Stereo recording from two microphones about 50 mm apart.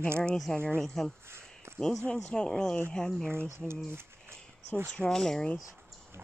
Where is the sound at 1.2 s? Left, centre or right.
Right.